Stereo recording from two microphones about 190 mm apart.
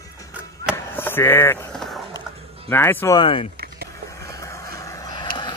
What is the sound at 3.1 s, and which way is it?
Speech, 25° left (ahead or behind).